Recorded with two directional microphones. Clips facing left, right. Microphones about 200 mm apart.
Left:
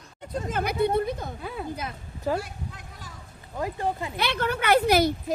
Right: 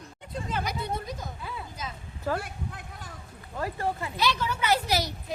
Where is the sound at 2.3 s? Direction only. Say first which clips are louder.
Left 2 dB; 55° right (ahead or behind).